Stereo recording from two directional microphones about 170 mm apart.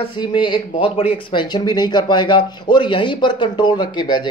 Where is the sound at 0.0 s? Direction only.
30° left (ahead or behind).